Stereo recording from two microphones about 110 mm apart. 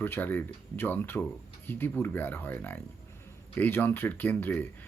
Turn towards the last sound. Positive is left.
turn(degrees=20)  # may be behind; listen again after turning